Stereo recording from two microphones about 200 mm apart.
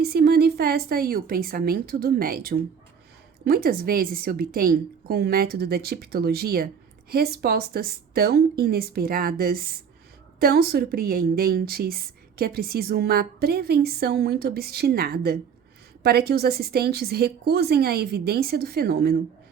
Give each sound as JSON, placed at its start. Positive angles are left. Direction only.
{"t": 0.0, "sound": "a woman's voice", "side_deg": -50}